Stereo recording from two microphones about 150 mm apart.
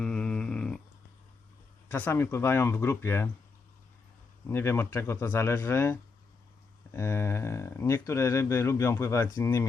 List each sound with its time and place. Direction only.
0.0 s a sound: 5° left (ahead or behind)
1.9 s speech: 15° left (ahead or behind)
4.4 s speech: 15° left (ahead or behind)